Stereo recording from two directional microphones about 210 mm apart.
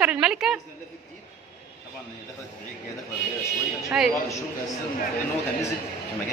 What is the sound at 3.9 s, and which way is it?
Speech, centre (ahead or behind).